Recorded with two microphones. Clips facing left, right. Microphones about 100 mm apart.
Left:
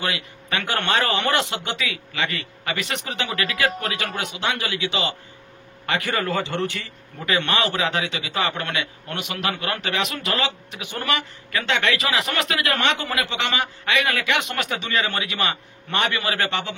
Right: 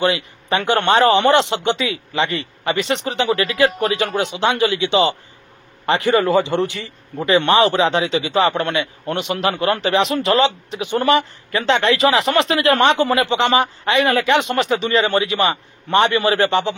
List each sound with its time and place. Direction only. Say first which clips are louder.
0.0 s speech: right 9 dB; 30° right (ahead or behind)
7.2 s a man's voice: right 8 dB; 30° right (ahead or behind)